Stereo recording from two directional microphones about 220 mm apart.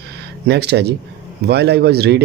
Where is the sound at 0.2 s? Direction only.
50° right (ahead or behind).